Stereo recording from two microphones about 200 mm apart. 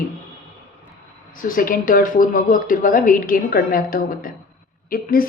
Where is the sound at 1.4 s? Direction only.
45° left (ahead or behind).